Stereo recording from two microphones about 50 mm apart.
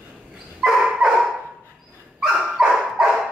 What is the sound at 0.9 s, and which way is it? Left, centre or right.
Dog, centre.